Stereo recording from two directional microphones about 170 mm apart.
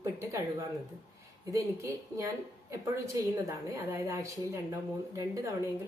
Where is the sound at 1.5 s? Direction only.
20° right (ahead or behind).